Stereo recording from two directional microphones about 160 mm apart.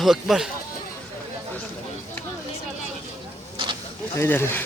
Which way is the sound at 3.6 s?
35° right (ahead or behind).